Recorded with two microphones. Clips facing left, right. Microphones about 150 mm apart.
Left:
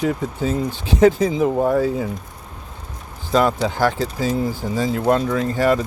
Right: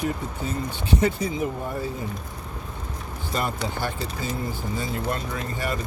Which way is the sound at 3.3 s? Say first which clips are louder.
Left 10 dB; 90° left.